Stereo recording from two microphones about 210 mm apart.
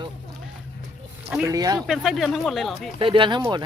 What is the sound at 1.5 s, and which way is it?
Speech, 20° right (ahead or behind).